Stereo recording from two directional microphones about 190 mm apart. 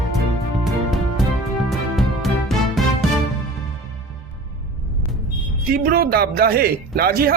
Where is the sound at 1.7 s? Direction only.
Centre (ahead or behind).